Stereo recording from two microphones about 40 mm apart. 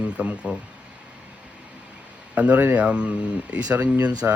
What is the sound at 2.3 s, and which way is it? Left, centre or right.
A man's voice, right.